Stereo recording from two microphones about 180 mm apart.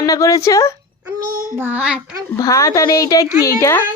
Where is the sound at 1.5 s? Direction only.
10° right (ahead or behind).